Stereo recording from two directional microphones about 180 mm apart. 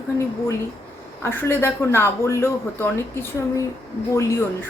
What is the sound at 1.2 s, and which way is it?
Speech, 15° left (ahead or behind).